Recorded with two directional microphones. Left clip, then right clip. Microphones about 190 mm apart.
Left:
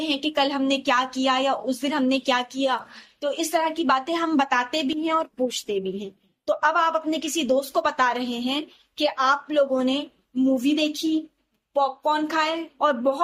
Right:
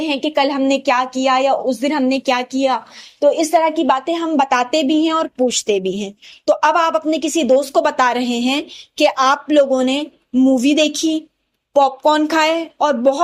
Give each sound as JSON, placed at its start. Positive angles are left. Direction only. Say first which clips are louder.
{"t": 0.0, "sound": "a woman's voice", "louder": "right 6 dB", "side_deg": -25}
{"t": 5.6, "sound": "a woman's voice", "louder": "right 9 dB", "side_deg": -35}